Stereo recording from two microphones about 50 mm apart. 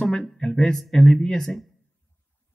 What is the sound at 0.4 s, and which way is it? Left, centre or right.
Speech, centre.